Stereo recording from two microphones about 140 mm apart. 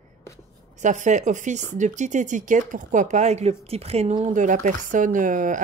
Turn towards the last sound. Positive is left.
turn(degrees=-65)  # may be behind; listen again after turning